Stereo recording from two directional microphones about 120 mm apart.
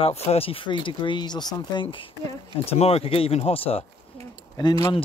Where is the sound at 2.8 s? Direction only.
55° left (ahead or behind).